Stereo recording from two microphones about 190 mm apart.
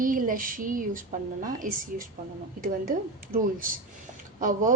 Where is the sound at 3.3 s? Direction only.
45° right (ahead or behind).